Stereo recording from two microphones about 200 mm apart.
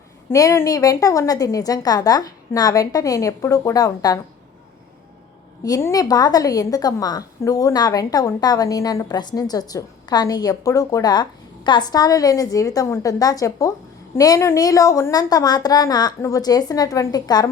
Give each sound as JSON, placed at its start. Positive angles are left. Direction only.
{"t": 0.3, "sound": "a woman's voice", "side_deg": 15}
{"t": 5.6, "sound": "a woman's voice", "side_deg": 15}